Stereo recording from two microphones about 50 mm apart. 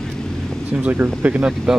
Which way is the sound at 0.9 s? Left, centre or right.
Right.